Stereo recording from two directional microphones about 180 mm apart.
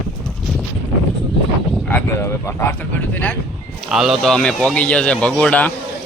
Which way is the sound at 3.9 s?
Centre (ahead or behind).